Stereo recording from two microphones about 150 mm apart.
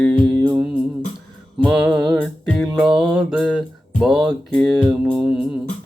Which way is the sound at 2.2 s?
5° left (ahead or behind).